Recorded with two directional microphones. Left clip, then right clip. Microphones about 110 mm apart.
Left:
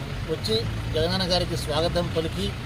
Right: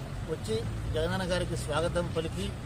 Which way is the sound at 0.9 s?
20° left (ahead or behind).